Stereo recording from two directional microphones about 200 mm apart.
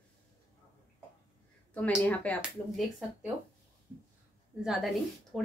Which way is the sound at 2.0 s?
5° left (ahead or behind).